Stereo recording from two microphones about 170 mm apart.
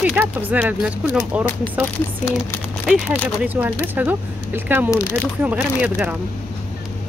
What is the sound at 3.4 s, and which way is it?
Speech, 10° right (ahead or behind).